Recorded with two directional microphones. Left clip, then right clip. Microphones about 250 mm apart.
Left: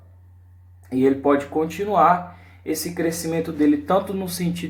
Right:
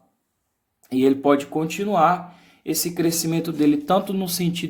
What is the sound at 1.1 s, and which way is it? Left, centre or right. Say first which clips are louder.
Speech: even; right.